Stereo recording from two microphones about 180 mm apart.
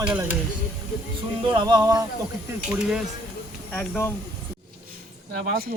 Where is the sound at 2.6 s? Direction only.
5° right (ahead or behind).